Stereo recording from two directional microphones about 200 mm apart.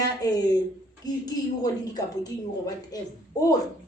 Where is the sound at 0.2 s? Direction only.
20° left (ahead or behind).